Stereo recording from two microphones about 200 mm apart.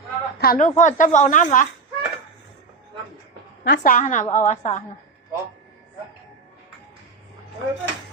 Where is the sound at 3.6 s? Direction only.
45° left (ahead or behind).